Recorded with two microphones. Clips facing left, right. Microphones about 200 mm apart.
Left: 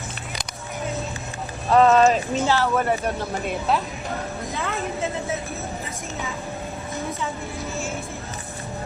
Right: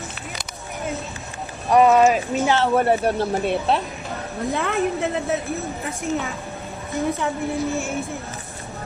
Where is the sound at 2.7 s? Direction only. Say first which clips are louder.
Right 4 dB; 30° right (ahead or behind).